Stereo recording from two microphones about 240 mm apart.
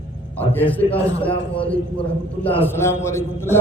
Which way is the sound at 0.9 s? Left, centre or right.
Left.